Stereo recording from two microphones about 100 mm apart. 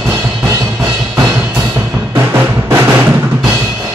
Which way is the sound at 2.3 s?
25° right (ahead or behind).